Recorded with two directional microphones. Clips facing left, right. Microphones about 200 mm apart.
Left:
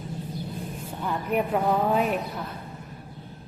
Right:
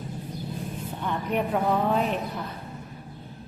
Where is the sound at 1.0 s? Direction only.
5° left (ahead or behind).